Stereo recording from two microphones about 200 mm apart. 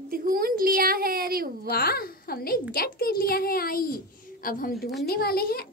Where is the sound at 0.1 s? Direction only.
45° right (ahead or behind).